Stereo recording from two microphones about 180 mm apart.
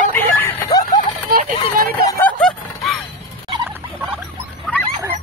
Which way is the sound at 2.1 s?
10° left (ahead or behind).